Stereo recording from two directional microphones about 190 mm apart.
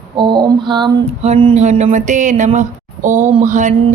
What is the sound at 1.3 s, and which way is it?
Speech, 30° right (ahead or behind).